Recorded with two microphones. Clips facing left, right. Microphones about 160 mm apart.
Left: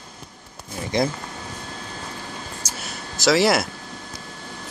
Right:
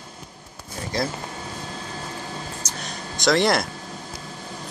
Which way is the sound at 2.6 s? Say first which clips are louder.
Right 1 dB; 5° left (ahead or behind).